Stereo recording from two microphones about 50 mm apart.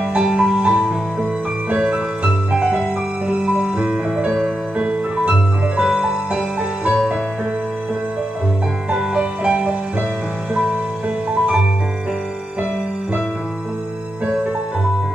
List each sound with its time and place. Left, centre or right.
0.2 s music: centre
8.9 s music: centre